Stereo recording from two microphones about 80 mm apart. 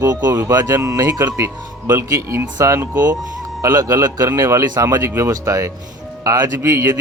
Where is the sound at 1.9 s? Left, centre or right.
Right.